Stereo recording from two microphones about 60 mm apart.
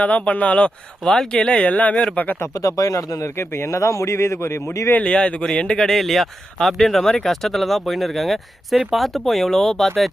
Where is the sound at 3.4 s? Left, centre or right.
Left.